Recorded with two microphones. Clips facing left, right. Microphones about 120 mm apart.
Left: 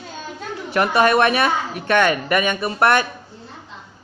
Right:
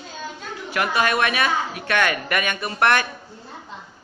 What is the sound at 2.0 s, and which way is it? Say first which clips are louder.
Speech: left 4 dB; 25° left (ahead or behind).